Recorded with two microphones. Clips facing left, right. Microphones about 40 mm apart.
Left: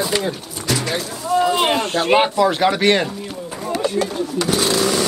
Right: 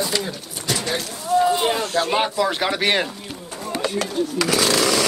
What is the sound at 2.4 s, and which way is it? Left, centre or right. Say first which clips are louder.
Speech: left 5 dB; centre.